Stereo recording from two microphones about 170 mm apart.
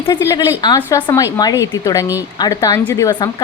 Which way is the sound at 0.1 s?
20° left (ahead or behind).